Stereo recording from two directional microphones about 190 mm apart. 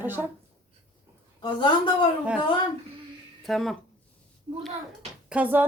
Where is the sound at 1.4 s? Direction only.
25° left (ahead or behind).